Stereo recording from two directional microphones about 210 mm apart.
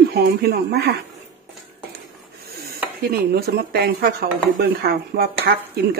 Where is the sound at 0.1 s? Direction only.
50° right (ahead or behind).